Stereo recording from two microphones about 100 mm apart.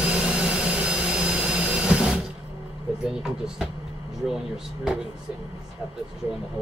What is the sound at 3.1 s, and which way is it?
Speech, 5° right (ahead or behind).